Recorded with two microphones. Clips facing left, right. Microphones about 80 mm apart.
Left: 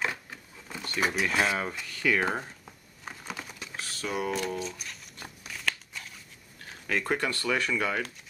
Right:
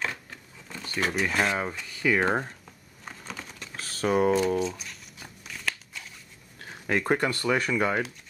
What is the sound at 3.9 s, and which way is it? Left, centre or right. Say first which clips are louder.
Speech: right 9 dB; right.